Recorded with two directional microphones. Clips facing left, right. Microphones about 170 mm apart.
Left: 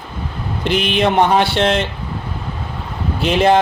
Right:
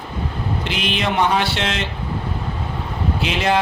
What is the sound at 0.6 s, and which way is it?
Speech, 55° left (ahead or behind).